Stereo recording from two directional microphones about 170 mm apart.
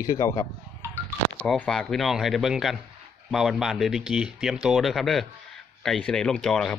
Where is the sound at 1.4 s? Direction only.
5° left (ahead or behind).